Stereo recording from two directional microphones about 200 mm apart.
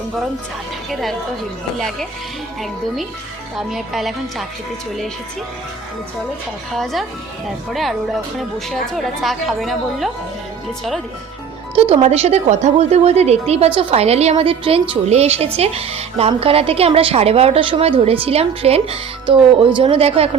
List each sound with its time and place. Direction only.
2.6 s a woman's voice: centre (ahead or behind)
6.7 s a woman's voice: centre (ahead or behind)
11.7 s speech: 30° right (ahead or behind)